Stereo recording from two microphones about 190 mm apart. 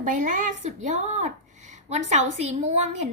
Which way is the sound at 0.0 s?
45° right (ahead or behind).